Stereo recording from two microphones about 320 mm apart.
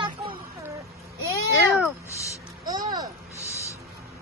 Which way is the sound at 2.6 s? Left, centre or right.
Centre.